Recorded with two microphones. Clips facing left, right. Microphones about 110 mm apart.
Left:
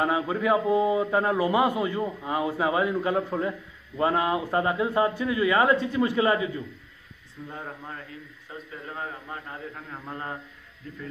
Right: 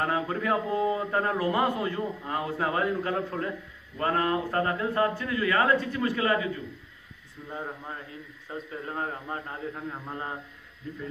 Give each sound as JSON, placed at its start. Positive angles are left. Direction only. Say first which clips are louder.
{"t": 0.0, "sound": "a man's voice", "louder": "left 3 dB", "side_deg": 10}
{"t": 7.4, "sound": "speech", "louder": "right 1 dB", "side_deg": -10}
{"t": 8.5, "sound": "speech", "louder": "right 4 dB", "side_deg": -35}
{"t": 9.5, "sound": "speech", "louder": "right 3 dB", "side_deg": -15}